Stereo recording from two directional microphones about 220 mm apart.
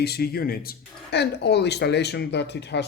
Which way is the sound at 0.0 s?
45° left (ahead or behind).